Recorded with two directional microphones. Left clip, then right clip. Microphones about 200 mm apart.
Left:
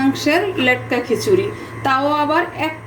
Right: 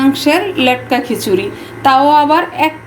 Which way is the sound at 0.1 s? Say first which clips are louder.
Right 4 dB; 50° right (ahead or behind).